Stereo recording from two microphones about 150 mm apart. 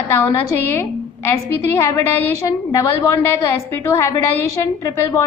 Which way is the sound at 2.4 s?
25° left (ahead or behind).